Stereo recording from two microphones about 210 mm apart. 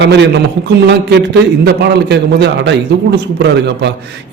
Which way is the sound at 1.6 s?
50° right (ahead or behind).